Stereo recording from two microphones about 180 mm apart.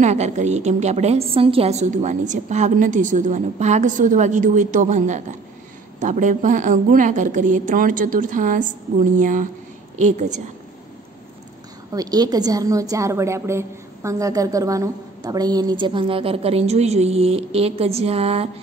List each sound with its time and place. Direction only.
0.0 s a woman's voice: 40° right (ahead or behind)
11.9 s a woman's voice: 20° right (ahead or behind)